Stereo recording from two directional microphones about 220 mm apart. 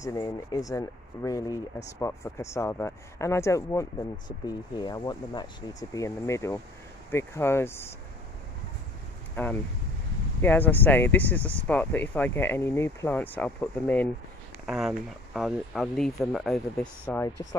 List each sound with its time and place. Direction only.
0.0 s speech: 15° left (ahead or behind)
9.3 s speech: 10° left (ahead or behind)